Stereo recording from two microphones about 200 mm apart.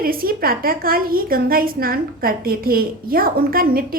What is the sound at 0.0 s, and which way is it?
A woman's voice, 45° right (ahead or behind).